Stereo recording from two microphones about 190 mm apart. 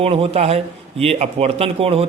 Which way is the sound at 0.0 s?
30° right (ahead or behind).